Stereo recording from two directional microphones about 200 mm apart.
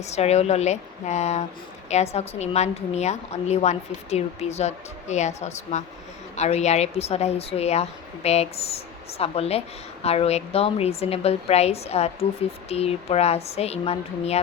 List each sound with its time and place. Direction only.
0.0 s a woman's voice: 35° left (ahead or behind)